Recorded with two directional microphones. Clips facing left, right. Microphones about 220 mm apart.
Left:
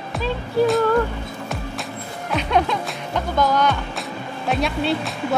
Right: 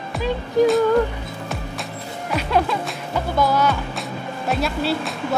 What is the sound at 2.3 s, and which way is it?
Speech, 5° right (ahead or behind).